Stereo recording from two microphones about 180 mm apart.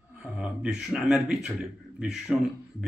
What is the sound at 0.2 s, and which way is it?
Speech, 5° right (ahead or behind).